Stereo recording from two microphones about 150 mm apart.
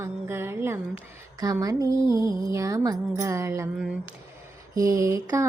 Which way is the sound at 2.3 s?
20° right (ahead or behind).